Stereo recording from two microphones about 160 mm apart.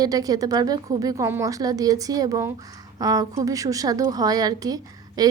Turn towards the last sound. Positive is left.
turn(degrees=-25)  # may be behind; listen again after turning